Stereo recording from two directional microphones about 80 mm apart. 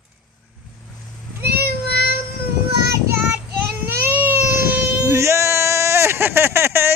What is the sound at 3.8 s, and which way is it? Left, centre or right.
Baby cry, right.